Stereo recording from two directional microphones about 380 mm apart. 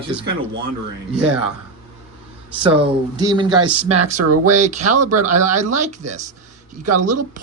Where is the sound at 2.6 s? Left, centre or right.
Centre.